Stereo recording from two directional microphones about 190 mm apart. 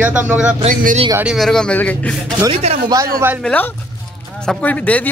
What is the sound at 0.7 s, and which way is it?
Speech, 40° right (ahead or behind).